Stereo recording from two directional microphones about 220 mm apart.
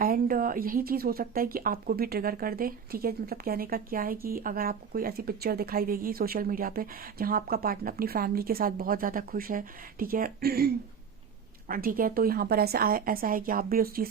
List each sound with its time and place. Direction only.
0.0 s a woman's voice: 40° right (ahead or behind)